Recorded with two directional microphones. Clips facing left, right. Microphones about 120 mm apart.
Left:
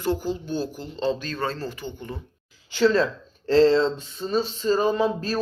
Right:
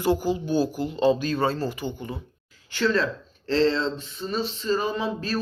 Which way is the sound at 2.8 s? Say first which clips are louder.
Left 4 dB; 30° left (ahead or behind).